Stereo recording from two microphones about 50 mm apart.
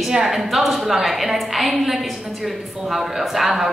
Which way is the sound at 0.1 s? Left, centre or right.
Centre.